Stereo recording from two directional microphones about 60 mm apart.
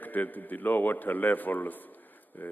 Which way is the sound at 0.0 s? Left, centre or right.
Left.